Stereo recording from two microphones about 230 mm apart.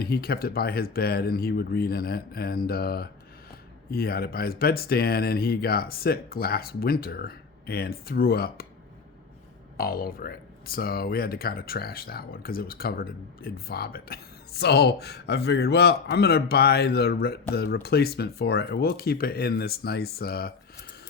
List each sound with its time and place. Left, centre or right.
0.0 s speech: left
9.7 s speech: left